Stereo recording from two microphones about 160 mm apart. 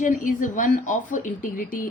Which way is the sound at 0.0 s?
55° left (ahead or behind).